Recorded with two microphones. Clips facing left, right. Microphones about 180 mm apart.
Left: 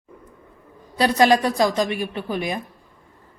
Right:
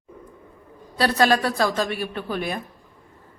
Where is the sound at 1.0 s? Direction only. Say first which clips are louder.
Left 3 dB; 15° left (ahead or behind).